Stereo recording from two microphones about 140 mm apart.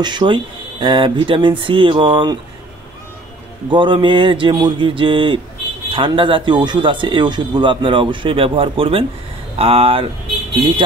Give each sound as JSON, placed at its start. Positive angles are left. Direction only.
{"t": 0.0, "sound": "a man's voice", "side_deg": -35}
{"t": 3.7, "sound": "a man's voice", "side_deg": -35}